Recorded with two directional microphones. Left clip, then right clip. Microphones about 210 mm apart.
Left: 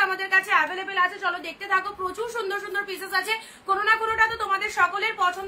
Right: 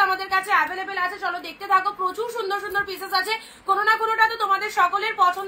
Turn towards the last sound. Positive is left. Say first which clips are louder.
# right 3 dB
turn(degrees=15)  # may be behind; listen again after turning